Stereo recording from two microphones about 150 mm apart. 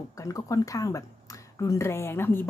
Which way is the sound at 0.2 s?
20° left (ahead or behind).